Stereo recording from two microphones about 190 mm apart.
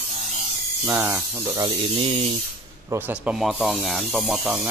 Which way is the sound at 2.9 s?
10° right (ahead or behind).